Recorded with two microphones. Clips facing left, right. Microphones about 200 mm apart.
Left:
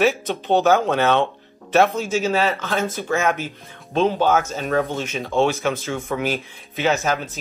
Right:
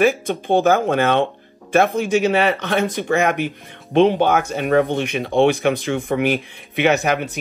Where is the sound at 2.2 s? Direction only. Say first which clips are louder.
Right 3 dB; 65° right (ahead or behind).